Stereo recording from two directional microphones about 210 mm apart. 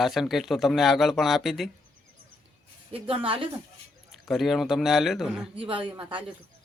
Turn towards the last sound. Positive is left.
turn(degrees=-25)  # may be behind; listen again after turning